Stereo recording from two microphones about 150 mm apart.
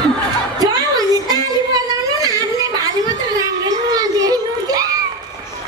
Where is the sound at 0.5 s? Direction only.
25° right (ahead or behind).